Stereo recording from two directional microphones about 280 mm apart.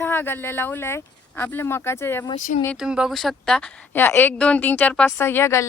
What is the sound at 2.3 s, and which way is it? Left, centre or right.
Speech, left.